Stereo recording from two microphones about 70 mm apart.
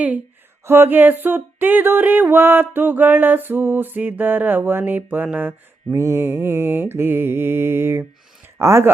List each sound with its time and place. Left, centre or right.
0.6 s a sound: right
5.9 s mantra: right
8.5 s speech: right